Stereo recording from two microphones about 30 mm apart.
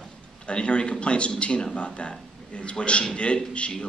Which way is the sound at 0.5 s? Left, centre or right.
Left.